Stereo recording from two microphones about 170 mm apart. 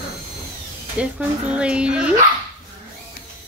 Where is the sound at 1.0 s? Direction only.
5° right (ahead or behind).